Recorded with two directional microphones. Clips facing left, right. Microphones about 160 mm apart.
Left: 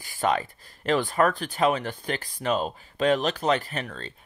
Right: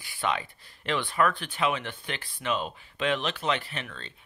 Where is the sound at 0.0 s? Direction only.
40° left (ahead or behind).